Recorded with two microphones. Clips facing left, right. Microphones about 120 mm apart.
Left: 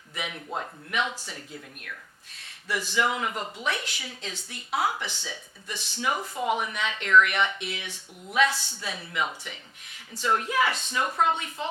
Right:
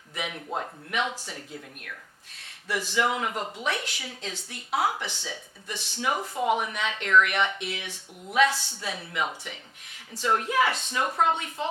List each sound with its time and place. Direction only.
0.1 s a sound: 45° right (ahead or behind)
0.9 s speech: 50° right (ahead or behind)
2.8 s speech: 60° right (ahead or behind)
6.1 s speech: 40° right (ahead or behind)